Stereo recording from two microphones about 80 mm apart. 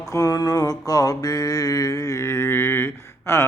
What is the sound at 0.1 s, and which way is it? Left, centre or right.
Mantra, left.